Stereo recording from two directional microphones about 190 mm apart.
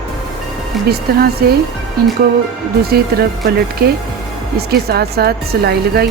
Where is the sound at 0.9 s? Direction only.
55° right (ahead or behind).